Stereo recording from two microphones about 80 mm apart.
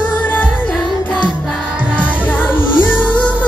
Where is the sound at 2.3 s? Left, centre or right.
Centre.